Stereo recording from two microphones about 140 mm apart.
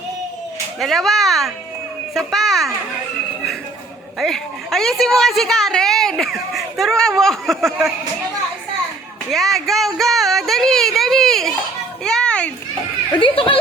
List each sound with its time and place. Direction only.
0.8 s a woman's voice: centre (ahead or behind)
4.2 s a woman's voice: centre (ahead or behind)
9.3 s speech: centre (ahead or behind)
12.0 s a sound: 5° left (ahead or behind)
13.1 s speech: 40° left (ahead or behind)